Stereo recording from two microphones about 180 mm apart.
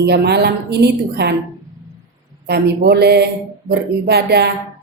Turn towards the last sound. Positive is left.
turn(degrees=-65)  # may be behind; listen again after turning